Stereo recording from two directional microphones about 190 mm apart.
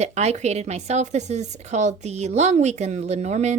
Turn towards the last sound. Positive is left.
turn(degrees=-35)  # may be behind; listen again after turning